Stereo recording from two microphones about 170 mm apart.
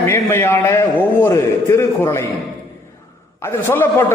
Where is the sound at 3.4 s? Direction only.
15° left (ahead or behind).